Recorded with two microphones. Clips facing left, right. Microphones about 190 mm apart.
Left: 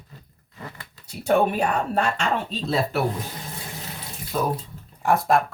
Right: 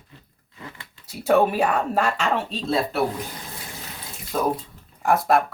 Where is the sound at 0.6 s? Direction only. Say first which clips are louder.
Left 1 dB; 40° left (ahead or behind).